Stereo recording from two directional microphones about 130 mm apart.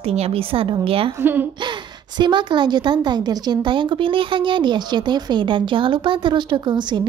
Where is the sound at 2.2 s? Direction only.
35° right (ahead or behind).